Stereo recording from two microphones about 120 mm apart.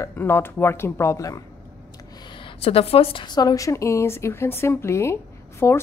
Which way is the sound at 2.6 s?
55° left (ahead or behind).